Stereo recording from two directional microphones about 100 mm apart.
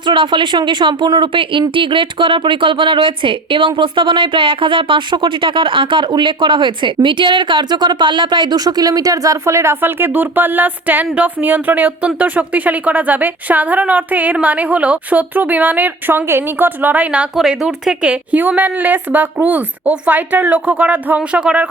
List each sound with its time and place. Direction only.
0.0 s speech: 55° right (ahead or behind); by 21.7 s 10° right (ahead or behind)